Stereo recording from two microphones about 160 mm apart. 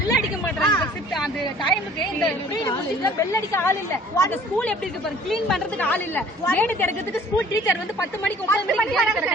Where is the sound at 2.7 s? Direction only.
20° left (ahead or behind).